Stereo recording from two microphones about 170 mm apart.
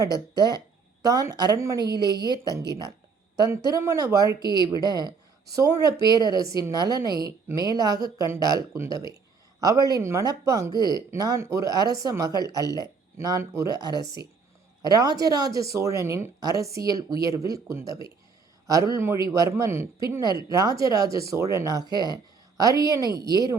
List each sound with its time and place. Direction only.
0.0 s a woman's voice: 25° right (ahead or behind)
3.3 s a woman's voice: 20° right (ahead or behind)